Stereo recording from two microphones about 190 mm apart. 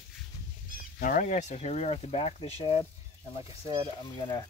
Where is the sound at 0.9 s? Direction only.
45° left (ahead or behind).